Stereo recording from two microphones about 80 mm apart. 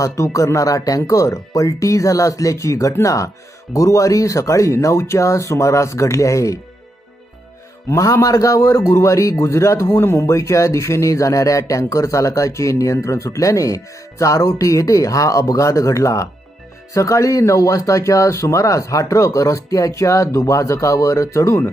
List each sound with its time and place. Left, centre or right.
0.0 s a man's voice: left
7.9 s a man's voice: left